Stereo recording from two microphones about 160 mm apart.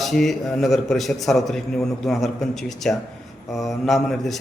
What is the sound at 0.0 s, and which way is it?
A man's voice, centre (ahead or behind).